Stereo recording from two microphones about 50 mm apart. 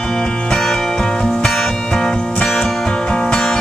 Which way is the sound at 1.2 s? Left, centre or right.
Centre.